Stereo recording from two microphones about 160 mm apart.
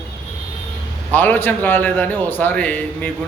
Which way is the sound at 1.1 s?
10° left (ahead or behind).